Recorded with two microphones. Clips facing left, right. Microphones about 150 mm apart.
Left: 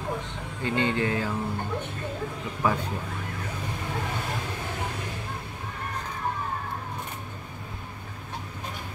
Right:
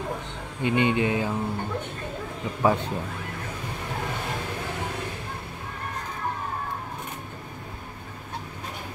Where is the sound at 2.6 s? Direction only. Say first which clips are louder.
Right 4 dB; 30° right (ahead or behind).